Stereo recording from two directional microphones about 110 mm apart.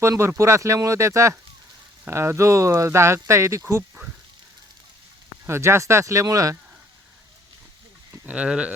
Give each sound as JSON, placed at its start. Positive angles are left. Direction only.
{"t": 0.0, "sound": "speech", "side_deg": -25}
{"t": 5.5, "sound": "speech", "side_deg": -25}
{"t": 8.3, "sound": "speech", "side_deg": -10}